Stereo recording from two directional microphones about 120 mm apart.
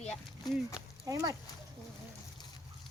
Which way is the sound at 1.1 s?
30° right (ahead or behind).